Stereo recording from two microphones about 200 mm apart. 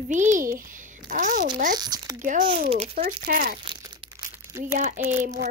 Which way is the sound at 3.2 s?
45° right (ahead or behind).